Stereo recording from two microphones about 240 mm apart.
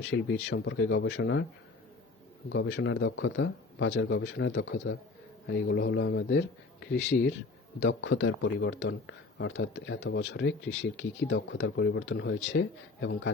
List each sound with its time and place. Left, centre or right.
0.0 s speech: left
2.5 s speech: left